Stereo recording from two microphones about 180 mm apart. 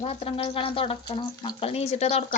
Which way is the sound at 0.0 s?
30° left (ahead or behind).